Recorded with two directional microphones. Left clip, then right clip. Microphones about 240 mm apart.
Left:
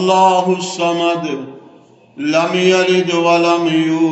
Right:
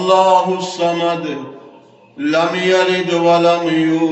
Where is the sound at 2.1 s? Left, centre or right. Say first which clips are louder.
Left 1 dB; left.